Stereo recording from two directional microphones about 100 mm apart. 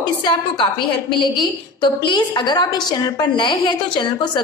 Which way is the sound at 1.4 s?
50° left (ahead or behind).